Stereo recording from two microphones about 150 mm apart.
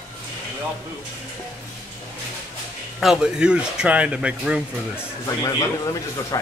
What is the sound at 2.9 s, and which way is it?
Speech, 5° right (ahead or behind).